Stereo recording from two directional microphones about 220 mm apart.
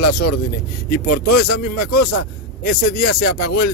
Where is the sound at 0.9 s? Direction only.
40° left (ahead or behind).